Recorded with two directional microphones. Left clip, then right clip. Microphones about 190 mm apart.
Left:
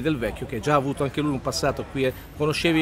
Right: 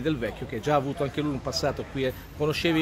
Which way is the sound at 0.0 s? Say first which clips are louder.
Left 3 dB; 20° left (ahead or behind).